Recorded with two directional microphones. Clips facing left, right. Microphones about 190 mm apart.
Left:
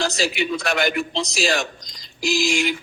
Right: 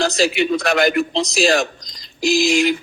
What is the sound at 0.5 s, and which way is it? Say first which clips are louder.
A man's voice: right 6 dB; 40° right (ahead or behind).